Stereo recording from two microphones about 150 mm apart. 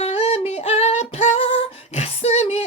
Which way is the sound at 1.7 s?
45° left (ahead or behind).